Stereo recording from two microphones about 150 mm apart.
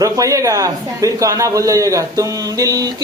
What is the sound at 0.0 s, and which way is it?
A man's voice, 20° right (ahead or behind).